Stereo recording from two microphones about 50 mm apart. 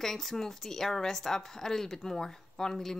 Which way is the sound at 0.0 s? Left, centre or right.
Centre.